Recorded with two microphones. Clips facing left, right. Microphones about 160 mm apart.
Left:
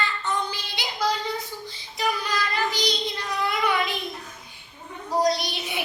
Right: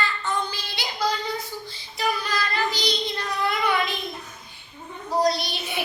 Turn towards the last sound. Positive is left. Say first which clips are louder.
# even
turn(degrees=15)  # may be behind; listen again after turning